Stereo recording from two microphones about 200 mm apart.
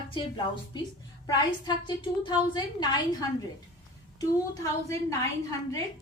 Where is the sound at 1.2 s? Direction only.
20° left (ahead or behind).